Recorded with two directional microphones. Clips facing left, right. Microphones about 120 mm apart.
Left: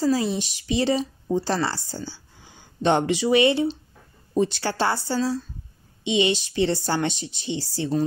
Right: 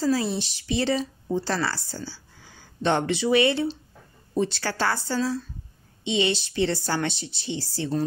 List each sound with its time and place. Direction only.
0.0 s a woman's voice: 15° left (ahead or behind)